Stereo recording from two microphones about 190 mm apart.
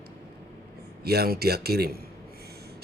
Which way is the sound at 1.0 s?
55° right (ahead or behind).